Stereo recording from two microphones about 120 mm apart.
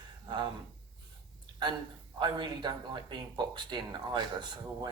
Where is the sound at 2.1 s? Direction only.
40° right (ahead or behind).